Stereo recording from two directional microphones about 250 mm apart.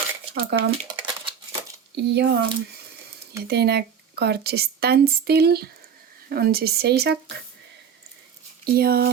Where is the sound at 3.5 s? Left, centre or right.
Right.